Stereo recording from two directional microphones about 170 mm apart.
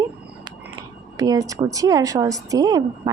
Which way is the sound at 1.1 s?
20° right (ahead or behind).